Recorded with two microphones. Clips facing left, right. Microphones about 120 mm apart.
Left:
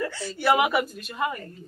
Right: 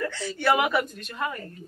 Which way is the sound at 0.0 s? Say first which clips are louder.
Even; 5° left (ahead or behind).